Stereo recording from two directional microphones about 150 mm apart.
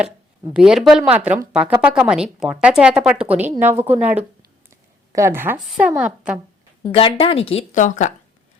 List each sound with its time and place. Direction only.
0.5 s a woman's voice: 5° right (ahead or behind)
6.8 s a woman's voice: 35° left (ahead or behind)
7.7 s a woman's voice: 55° left (ahead or behind)